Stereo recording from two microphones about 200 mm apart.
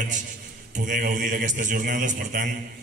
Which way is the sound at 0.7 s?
40° right (ahead or behind).